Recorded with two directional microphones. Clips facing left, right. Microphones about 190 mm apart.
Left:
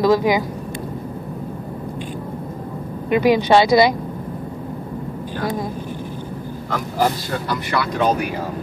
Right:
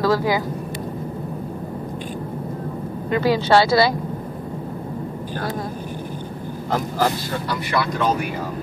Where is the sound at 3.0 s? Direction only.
15° left (ahead or behind).